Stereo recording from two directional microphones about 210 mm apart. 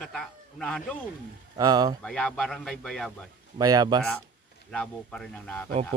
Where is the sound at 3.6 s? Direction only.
20° right (ahead or behind).